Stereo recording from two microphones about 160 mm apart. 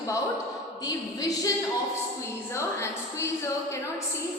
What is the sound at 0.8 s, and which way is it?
Speech, 20° left (ahead or behind).